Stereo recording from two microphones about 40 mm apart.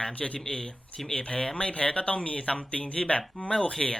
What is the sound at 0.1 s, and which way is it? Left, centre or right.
Speech, left.